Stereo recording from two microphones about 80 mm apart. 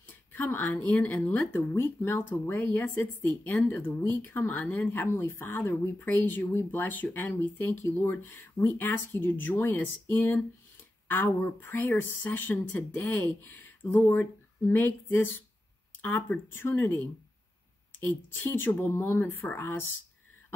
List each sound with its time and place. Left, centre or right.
0.4 s a woman's voice: left